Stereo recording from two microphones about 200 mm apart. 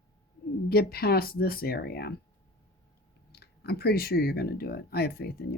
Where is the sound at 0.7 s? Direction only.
50° left (ahead or behind).